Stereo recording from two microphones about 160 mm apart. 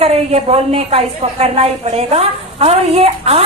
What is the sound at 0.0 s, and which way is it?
A man's voice, 40° right (ahead or behind).